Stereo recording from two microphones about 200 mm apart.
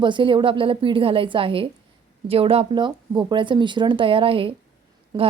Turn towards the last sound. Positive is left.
turn(degrees=-20)  # may be behind; listen again after turning